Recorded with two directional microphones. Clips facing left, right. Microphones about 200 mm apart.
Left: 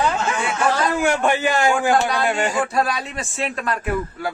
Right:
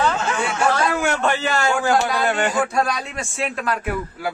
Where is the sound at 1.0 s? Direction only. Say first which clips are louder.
Left 2 dB; 10° left (ahead or behind).